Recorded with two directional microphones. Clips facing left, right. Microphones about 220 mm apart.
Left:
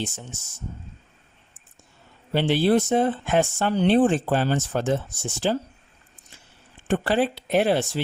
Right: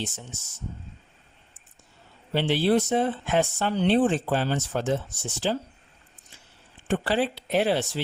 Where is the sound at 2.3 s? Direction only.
50° left (ahead or behind).